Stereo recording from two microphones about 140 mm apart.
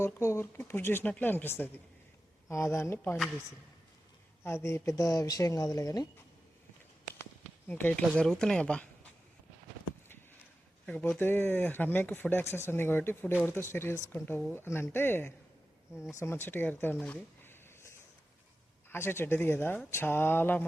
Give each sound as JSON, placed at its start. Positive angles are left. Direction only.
{"t": 0.0, "sound": "speech", "side_deg": 20}
{"t": 4.4, "sound": "speech", "side_deg": 20}
{"t": 7.7, "sound": "speech", "side_deg": 10}
{"t": 10.8, "sound": "speech", "side_deg": 10}
{"t": 17.0, "sound": "a sound", "side_deg": 10}
{"t": 18.9, "sound": "speech", "side_deg": 15}